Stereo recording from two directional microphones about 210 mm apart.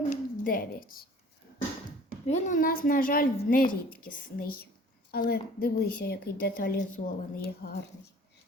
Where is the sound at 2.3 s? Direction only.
35° left (ahead or behind).